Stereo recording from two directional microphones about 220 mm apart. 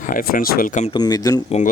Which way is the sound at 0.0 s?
40° left (ahead or behind).